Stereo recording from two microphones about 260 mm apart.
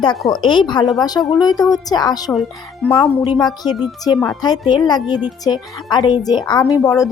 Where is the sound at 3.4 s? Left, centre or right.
Centre.